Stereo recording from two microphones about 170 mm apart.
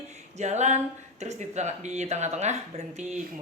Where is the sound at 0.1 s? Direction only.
40° right (ahead or behind).